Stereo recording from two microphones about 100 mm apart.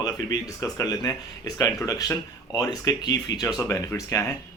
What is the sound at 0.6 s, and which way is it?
Speech, 40° left (ahead or behind).